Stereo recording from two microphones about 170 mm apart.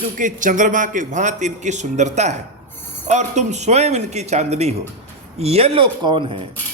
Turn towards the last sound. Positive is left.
turn(degrees=-30)  # may be behind; listen again after turning